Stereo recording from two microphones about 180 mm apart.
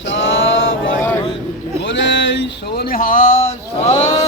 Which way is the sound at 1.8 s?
85° left.